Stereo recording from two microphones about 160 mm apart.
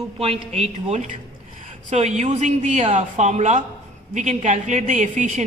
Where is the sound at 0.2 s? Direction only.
40° right (ahead or behind).